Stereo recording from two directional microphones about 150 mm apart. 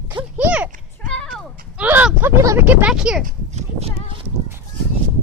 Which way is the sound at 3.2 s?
45° right (ahead or behind).